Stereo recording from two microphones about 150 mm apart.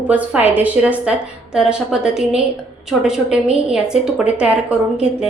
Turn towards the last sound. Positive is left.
turn(degrees=-5)  # may be behind; listen again after turning